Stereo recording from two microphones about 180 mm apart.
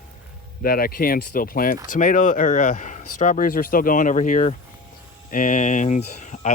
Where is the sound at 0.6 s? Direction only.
55° left (ahead or behind).